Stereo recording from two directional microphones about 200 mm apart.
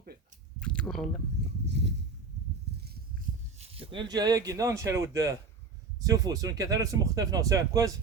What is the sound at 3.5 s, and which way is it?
Speech, 25° right (ahead or behind).